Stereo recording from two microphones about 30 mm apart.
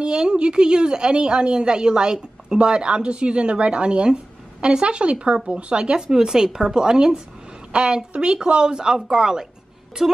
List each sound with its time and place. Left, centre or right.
0.0 s a woman's voice: right
4.1 s a sound: right
4.8 s a woman's voice: right
5.9 s speech: right
7.7 s a woman's voice: right
10.0 s speech: centre